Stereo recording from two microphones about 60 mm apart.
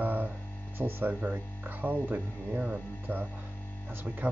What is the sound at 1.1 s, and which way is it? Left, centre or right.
Speech, right.